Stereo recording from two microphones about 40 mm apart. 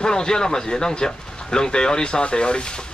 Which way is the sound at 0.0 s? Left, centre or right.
Centre.